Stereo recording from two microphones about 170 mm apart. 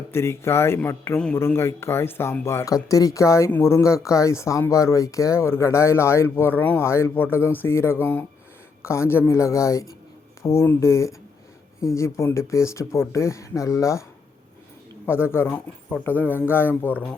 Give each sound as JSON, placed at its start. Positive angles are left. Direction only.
{"t": 0.1, "sound": "a man's voice", "side_deg": 15}
{"t": 15.0, "sound": "a man's voice", "side_deg": 15}